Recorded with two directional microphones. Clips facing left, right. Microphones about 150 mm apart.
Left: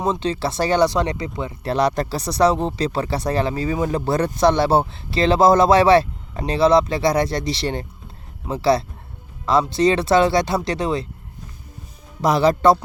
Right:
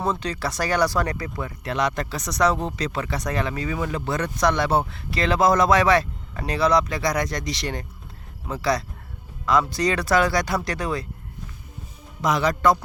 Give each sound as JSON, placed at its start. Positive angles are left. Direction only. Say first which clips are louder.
{"t": 0.0, "sound": "speech", "louder": "left 4 dB", "side_deg": 25}
{"t": 1.6, "sound": "speech", "louder": "left 6 dB", "side_deg": 35}
{"t": 12.2, "sound": "a man's voice", "louder": "left 5 dB", "side_deg": 30}